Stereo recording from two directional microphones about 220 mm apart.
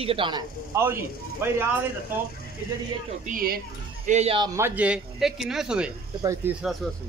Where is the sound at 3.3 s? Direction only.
40° right (ahead or behind).